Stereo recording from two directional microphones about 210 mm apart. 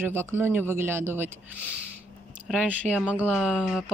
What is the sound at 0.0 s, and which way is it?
Speech, 10° right (ahead or behind).